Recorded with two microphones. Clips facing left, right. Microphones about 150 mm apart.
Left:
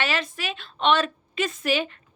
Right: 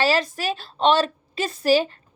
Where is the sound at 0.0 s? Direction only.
35° right (ahead or behind).